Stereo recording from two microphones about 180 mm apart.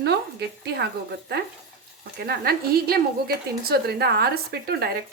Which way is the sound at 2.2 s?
60° right (ahead or behind).